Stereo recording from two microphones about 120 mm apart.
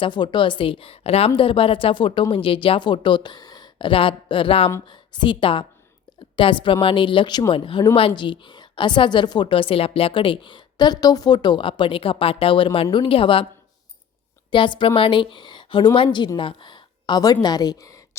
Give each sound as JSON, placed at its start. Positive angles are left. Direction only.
{"t": 0.0, "sound": "a woman's voice", "side_deg": 40}
{"t": 14.5, "sound": "a woman's voice", "side_deg": 45}